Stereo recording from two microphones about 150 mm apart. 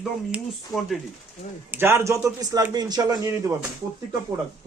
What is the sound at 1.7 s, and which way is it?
A man's voice, 15° right (ahead or behind).